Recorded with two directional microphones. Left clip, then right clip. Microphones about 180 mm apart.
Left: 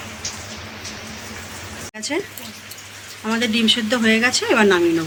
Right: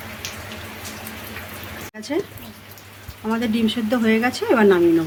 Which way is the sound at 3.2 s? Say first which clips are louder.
Left 5 dB; 25° right (ahead or behind).